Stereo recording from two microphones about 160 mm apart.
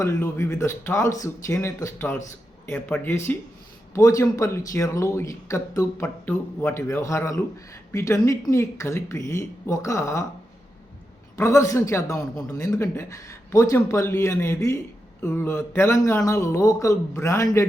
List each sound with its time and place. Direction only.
0.0 s a man's voice: 15° left (ahead or behind)
11.3 s a man's voice: 15° left (ahead or behind)